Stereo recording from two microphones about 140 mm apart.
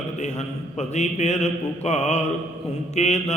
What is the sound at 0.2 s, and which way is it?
A man's voice, 55° left (ahead or behind).